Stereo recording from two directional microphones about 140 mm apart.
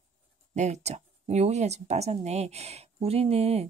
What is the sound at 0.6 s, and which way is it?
Speech, 55° right (ahead or behind).